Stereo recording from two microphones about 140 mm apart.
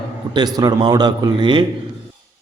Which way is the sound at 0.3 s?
30° right (ahead or behind).